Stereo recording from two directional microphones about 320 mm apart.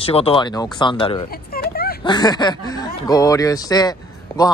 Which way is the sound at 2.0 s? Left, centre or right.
Centre.